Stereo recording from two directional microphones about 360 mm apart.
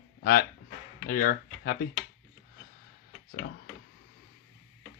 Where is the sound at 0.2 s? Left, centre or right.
Left.